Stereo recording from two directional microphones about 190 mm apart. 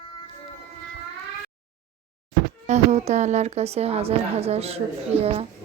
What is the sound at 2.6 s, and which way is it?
A woman's voice, 35° right (ahead or behind).